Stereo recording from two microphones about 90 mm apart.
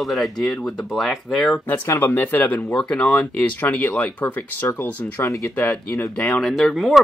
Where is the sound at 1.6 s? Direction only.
25° left (ahead or behind).